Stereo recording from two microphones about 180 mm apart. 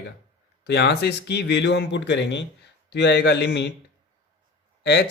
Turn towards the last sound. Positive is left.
turn(degrees=70)  # may be behind; listen again after turning